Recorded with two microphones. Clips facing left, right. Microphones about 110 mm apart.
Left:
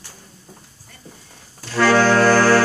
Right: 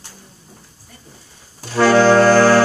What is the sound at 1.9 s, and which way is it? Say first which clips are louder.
Music: right 4 dB; 25° right (ahead or behind).